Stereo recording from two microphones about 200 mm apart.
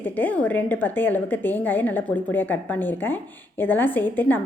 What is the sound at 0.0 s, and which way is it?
A woman's voice, 10° left (ahead or behind).